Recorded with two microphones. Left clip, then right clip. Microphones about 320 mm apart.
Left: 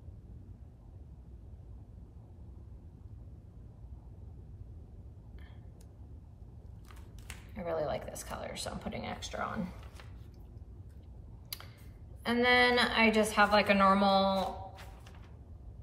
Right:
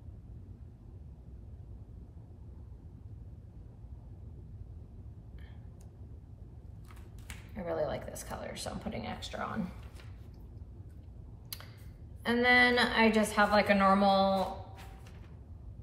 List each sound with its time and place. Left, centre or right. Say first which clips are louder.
7.5 s a woman's voice: even; centre
12.2 s a woman's voice: right 1 dB; centre